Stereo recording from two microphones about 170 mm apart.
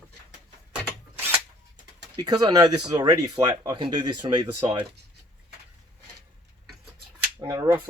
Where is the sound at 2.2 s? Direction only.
25° right (ahead or behind).